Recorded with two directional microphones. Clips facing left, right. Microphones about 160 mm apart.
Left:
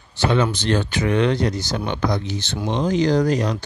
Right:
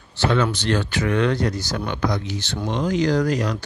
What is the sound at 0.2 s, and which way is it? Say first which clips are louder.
Speech: left 1 dB; 15° left (ahead or behind).